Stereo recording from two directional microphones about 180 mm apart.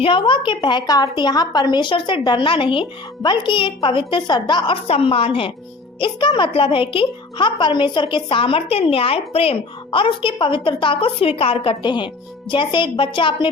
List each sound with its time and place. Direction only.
0.0 s a woman's voice: 30° left (ahead or behind)